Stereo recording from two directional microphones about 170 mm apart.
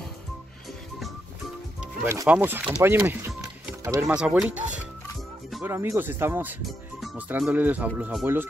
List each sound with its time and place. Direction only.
2.2 s speech: 10° right (ahead or behind)
4.1 s speech: 5° right (ahead or behind)